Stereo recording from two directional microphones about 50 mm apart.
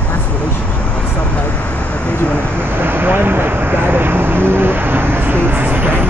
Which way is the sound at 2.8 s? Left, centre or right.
Right.